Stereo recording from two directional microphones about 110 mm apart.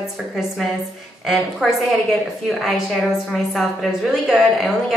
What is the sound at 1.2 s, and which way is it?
A woman's voice, centre (ahead or behind).